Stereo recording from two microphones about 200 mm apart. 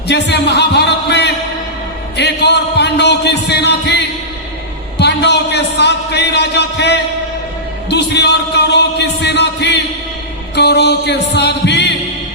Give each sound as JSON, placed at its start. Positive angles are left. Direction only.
{"t": 0.1, "sound": "a man's voice", "side_deg": 55}